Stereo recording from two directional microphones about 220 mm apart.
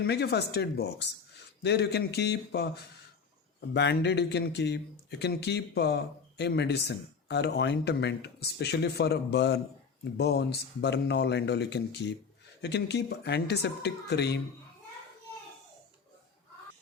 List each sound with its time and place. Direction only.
0.0 s speech: 50° left (ahead or behind)